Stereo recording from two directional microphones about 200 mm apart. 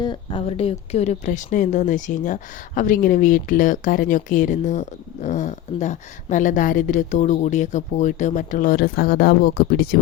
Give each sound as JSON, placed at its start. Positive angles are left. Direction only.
{"t": 0.0, "sound": "speech", "side_deg": 20}